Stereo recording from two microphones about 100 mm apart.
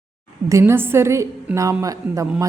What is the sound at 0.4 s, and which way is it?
A woman's voice, 30° right (ahead or behind).